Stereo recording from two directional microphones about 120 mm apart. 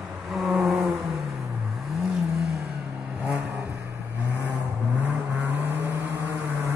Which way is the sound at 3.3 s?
10° right (ahead or behind).